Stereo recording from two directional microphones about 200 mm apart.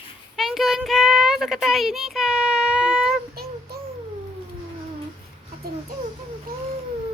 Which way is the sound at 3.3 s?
50° right (ahead or behind).